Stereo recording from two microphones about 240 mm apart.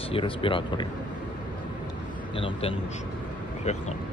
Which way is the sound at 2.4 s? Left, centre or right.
Left.